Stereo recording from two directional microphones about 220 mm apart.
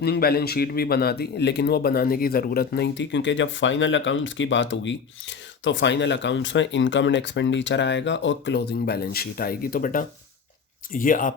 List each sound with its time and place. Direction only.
0.0 s a man's voice: 45° left (ahead or behind)